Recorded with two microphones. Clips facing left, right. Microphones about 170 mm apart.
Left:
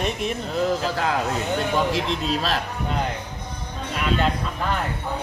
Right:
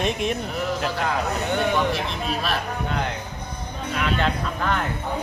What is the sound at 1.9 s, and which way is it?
Speech, 90° left.